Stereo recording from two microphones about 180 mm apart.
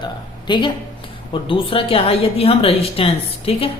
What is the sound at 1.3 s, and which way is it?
A woman's voice, 30° left (ahead or behind).